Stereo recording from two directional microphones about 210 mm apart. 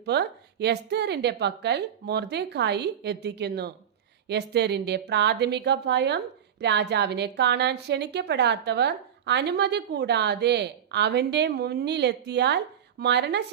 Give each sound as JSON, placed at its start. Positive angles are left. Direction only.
{"t": 0.0, "sound": "a woman's voice", "side_deg": -50}